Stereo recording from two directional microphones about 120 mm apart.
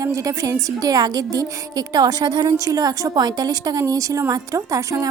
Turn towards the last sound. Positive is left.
turn(degrees=-25)  # may be behind; listen again after turning